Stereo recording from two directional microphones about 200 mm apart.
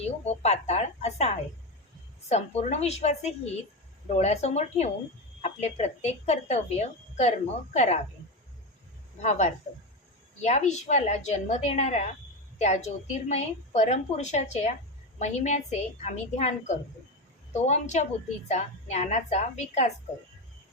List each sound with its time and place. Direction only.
0.0 s a woman's voice: 35° left (ahead or behind)
9.2 s a woman's voice: 35° left (ahead or behind)